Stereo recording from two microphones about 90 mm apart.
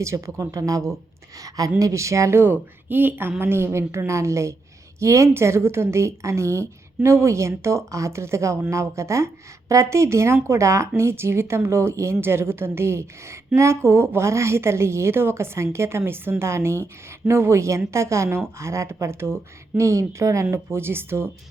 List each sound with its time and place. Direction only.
0.0 s a woman's voice: 35° right (ahead or behind)